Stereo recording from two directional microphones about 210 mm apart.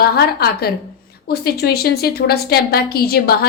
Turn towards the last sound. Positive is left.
turn(degrees=45)  # may be behind; listen again after turning